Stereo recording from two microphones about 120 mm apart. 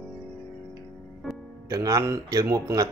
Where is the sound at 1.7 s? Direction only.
30° right (ahead or behind).